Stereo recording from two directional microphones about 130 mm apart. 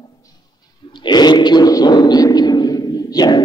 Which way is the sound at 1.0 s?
35° left (ahead or behind).